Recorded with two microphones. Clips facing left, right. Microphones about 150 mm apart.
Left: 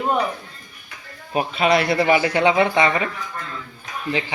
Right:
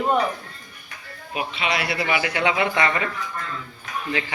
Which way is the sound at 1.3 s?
40° left (ahead or behind).